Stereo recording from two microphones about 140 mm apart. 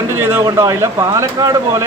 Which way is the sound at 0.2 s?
15° right (ahead or behind).